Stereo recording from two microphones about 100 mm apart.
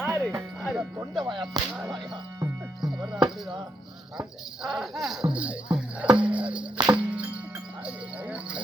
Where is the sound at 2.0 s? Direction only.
45° right (ahead or behind).